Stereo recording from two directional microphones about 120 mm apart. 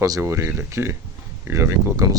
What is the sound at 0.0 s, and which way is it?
Speech, 25° right (ahead or behind).